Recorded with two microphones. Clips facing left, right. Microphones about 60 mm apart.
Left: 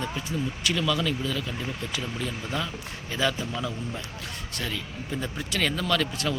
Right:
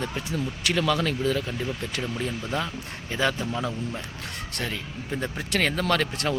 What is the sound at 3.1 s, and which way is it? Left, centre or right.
Speech, right.